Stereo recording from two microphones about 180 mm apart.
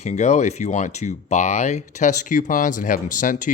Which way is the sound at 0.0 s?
40° left (ahead or behind).